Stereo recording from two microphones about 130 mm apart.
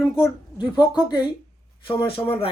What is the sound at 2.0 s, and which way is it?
Speech, 45° left (ahead or behind).